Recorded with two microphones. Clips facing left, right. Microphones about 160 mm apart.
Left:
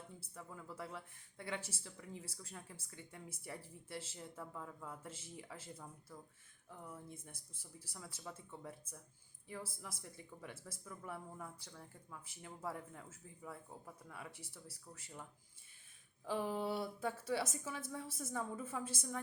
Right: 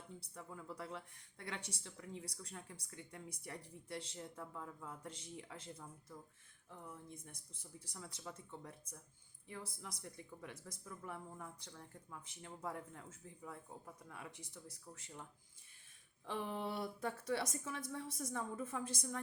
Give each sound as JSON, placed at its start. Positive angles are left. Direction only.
{"t": 0.2, "sound": "speech", "side_deg": 0}
{"t": 9.8, "sound": "speech", "side_deg": 0}
{"t": 16.2, "sound": "speech", "side_deg": 5}